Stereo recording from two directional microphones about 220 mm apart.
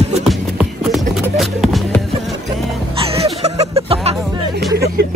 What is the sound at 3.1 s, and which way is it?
Music, 25° right (ahead or behind).